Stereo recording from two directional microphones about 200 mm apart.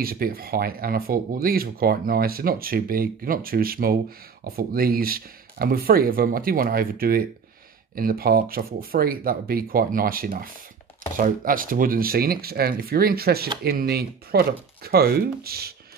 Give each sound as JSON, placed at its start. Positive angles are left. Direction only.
{"t": 0.0, "sound": "speech", "side_deg": -45}